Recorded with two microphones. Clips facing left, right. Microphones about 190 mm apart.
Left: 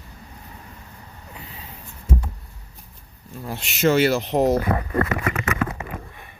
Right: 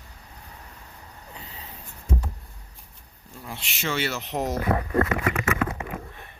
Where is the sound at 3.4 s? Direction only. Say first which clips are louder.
Left 12 dB; 45° left (ahead or behind).